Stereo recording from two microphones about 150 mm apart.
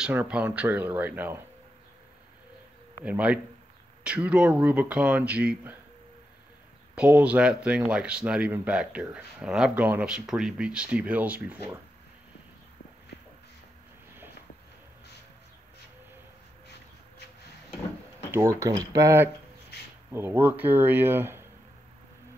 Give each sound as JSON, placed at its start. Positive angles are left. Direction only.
{"t": 0.0, "sound": "speech", "side_deg": -10}
{"t": 3.0, "sound": "speech", "side_deg": -10}
{"t": 7.0, "sound": "speech", "side_deg": -10}
{"t": 18.3, "sound": "speech", "side_deg": -20}
{"t": 19.7, "sound": "a sound", "side_deg": 90}
{"t": 20.1, "sound": "speech", "side_deg": -15}